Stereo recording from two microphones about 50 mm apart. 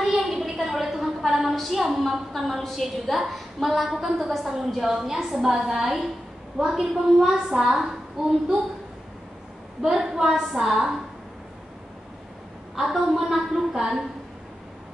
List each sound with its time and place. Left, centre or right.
0.0 s a woman's voice: centre
9.8 s a woman's voice: centre
12.7 s a woman's voice: centre